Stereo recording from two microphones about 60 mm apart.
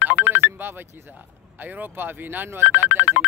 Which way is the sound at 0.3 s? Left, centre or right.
Right.